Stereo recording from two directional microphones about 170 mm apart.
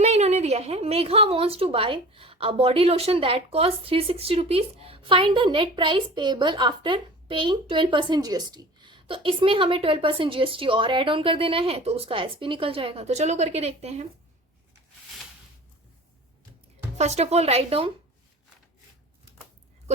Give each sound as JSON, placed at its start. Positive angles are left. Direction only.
{"t": 0.0, "sound": "a woman's voice", "side_deg": -40}
{"t": 17.0, "sound": "a woman's voice", "side_deg": -40}